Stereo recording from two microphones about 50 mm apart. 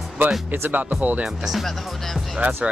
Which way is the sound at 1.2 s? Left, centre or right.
Centre.